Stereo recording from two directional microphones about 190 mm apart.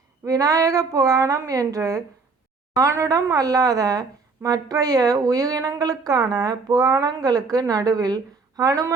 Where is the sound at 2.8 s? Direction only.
15° right (ahead or behind).